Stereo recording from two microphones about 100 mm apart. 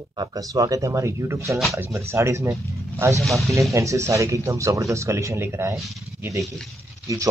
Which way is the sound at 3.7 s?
30° right (ahead or behind).